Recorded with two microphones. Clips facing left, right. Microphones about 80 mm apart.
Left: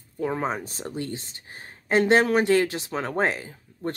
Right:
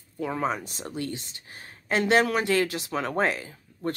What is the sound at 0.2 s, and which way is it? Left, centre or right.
Speech, left.